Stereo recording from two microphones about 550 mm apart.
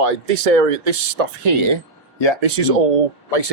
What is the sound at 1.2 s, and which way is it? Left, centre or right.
Speech, right.